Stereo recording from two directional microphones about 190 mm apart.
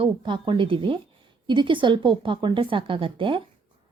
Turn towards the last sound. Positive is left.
turn(degrees=-25)  # may be behind; listen again after turning